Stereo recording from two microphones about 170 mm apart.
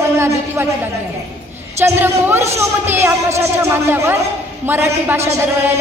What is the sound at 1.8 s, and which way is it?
A woman's voice, 15° right (ahead or behind).